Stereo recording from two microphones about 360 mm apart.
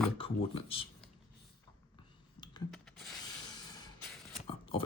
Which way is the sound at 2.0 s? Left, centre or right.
Centre.